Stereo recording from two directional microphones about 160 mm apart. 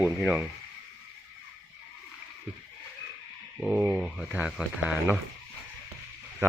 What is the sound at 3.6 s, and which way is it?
Speech, 5° right (ahead or behind).